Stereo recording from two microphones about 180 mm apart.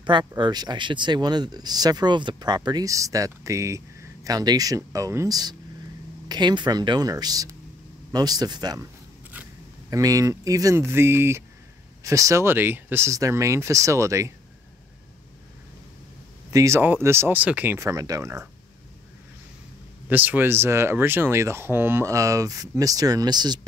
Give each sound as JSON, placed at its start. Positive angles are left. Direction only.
{"t": 0.0, "sound": "speech", "side_deg": -25}
{"t": 9.8, "sound": "speech", "side_deg": -20}
{"t": 16.5, "sound": "speech", "side_deg": -15}
{"t": 20.1, "sound": "speech", "side_deg": -10}